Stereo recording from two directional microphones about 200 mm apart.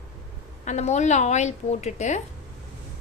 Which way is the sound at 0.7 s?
35° left (ahead or behind).